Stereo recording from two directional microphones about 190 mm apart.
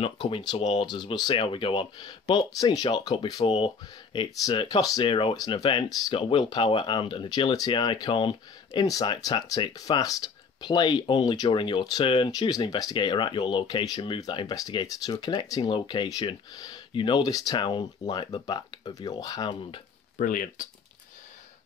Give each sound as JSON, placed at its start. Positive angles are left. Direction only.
{"t": 0.0, "sound": "speech", "side_deg": 25}
{"t": 20.2, "sound": "speech", "side_deg": 45}